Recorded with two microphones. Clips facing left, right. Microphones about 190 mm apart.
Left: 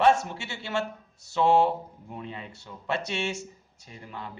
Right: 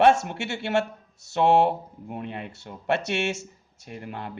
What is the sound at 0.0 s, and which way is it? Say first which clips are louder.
Speech: right 3 dB; 60° right (ahead or behind).